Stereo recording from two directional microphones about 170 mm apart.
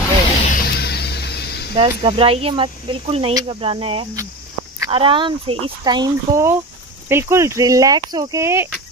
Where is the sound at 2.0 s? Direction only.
35° right (ahead or behind).